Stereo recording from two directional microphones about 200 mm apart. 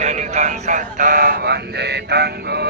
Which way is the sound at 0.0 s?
35° right (ahead or behind).